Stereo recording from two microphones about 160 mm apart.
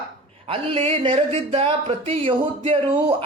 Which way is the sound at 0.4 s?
35° right (ahead or behind).